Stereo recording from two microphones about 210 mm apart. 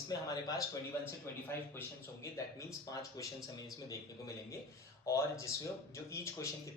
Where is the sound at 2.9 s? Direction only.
15° left (ahead or behind).